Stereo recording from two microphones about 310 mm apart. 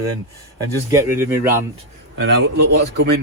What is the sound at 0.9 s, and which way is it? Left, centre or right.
Speech, centre.